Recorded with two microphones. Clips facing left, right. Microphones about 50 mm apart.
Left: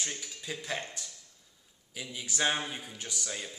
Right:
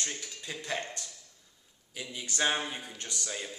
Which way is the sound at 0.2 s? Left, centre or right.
Centre.